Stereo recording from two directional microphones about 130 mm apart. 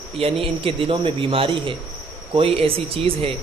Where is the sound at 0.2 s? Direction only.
45° right (ahead or behind).